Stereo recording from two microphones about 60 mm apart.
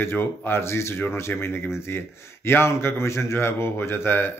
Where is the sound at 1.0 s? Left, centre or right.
Left.